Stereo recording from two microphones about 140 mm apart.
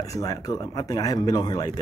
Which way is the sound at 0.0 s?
25° left (ahead or behind).